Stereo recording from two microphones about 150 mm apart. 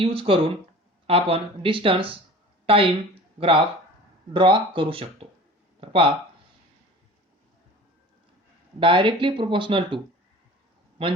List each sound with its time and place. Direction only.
0.0 s a woman's voice: 40° right (ahead or behind)
4.4 s speech: 35° right (ahead or behind)
8.8 s speech: 35° right (ahead or behind)